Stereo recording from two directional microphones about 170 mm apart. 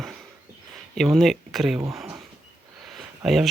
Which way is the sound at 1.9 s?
5° right (ahead or behind).